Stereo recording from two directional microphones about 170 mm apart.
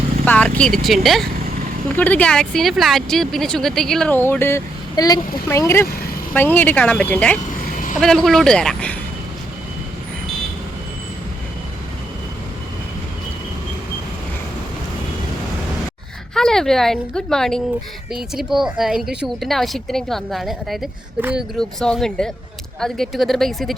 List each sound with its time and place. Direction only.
0.3 s a woman's voice: 10° left (ahead or behind)
16.3 s a woman's voice: 5° left (ahead or behind)